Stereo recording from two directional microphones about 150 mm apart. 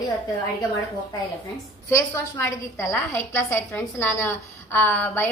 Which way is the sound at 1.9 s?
20° left (ahead or behind).